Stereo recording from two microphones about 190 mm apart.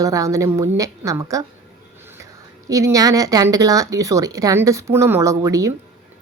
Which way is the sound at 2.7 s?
20° right (ahead or behind).